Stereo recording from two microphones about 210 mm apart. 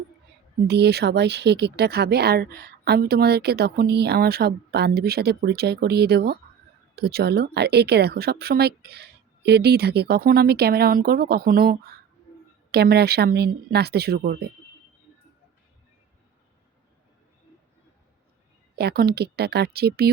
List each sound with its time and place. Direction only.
0.7 s speech: 50° right (ahead or behind)
18.8 s speech: 50° right (ahead or behind)